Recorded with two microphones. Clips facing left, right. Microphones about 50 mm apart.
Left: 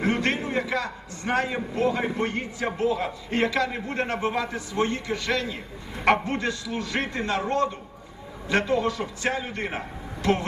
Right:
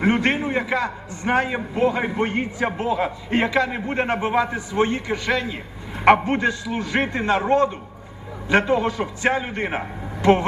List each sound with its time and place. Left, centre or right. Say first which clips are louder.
0.0 s a man's voice: right 5 dB; right